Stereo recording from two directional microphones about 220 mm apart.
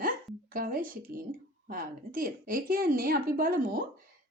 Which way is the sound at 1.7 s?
40° right (ahead or behind).